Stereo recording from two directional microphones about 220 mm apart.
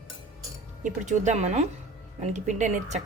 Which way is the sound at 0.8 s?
35° right (ahead or behind).